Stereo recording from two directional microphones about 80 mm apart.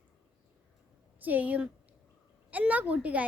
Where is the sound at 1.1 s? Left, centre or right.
Right.